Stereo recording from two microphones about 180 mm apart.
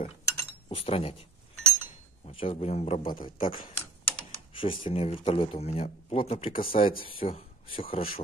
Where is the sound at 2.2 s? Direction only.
30° left (ahead or behind).